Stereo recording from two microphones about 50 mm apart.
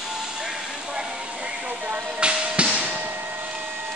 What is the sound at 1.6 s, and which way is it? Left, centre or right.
Music, right.